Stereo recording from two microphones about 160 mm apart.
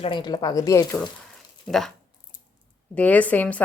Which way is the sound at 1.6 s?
Centre (ahead or behind).